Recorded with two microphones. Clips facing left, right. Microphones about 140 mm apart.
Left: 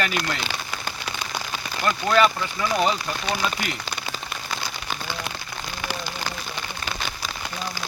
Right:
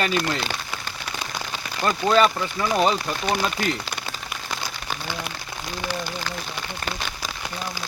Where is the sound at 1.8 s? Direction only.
25° right (ahead or behind).